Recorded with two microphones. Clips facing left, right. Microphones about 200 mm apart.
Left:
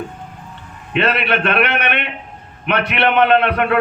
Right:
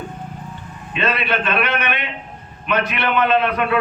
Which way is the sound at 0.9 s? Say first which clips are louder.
Left 4 dB; 65° left (ahead or behind).